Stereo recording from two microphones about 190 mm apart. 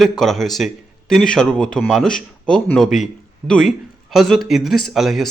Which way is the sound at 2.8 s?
40° left (ahead or behind).